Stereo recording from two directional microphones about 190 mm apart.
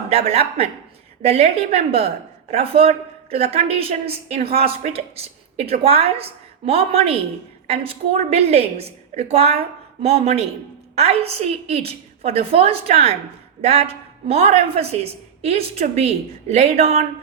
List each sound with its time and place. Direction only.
0.1 s a woman's voice: 35° right (ahead or behind)